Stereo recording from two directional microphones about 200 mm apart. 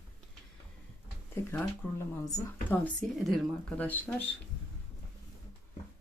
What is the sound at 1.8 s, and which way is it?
Speech, 10° left (ahead or behind).